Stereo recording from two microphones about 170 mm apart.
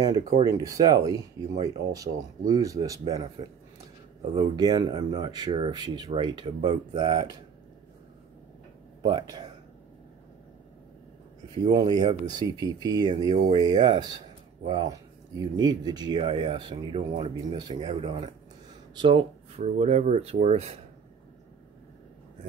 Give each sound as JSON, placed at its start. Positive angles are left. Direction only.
{"t": 0.0, "sound": "speech", "side_deg": -25}
{"t": 9.0, "sound": "speech", "side_deg": -30}
{"t": 11.7, "sound": "speech", "side_deg": -25}
{"t": 19.6, "sound": "speech", "side_deg": -40}